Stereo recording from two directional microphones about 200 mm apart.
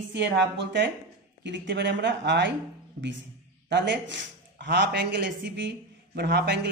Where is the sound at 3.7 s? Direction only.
65° right (ahead or behind).